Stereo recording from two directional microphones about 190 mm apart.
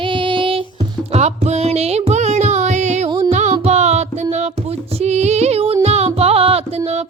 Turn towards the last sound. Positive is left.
turn(degrees=-35)  # may be behind; listen again after turning